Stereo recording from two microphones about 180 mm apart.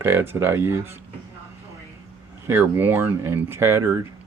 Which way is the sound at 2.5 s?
10° right (ahead or behind).